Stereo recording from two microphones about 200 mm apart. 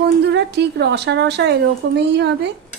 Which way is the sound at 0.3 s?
60° right (ahead or behind).